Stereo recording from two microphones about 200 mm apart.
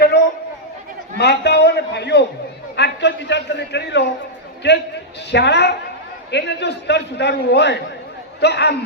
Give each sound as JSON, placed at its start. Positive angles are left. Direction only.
{"t": 1.2, "sound": "a man's voice", "side_deg": 55}
{"t": 2.7, "sound": "a sound", "side_deg": 60}
{"t": 4.6, "sound": "a man's voice", "side_deg": 60}